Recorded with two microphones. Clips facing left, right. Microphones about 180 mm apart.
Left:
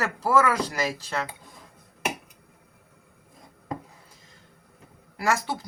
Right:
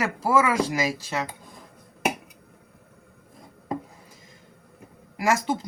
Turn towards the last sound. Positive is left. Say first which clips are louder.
# right 3 dB
turn(degrees=-15)  # may be behind; listen again after turning